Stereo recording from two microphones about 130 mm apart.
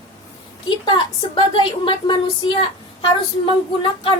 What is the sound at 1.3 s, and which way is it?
A woman's voice, 40° left (ahead or behind).